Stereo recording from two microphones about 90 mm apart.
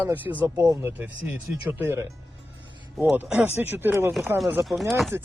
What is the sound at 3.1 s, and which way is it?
Speech, 25° right (ahead or behind).